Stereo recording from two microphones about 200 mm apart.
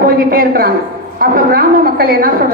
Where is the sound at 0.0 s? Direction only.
45° right (ahead or behind).